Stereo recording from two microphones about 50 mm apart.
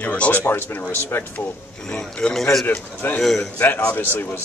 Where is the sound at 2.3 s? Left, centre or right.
Centre.